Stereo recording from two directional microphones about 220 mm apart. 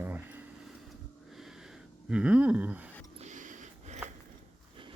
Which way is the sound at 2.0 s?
5° right (ahead or behind).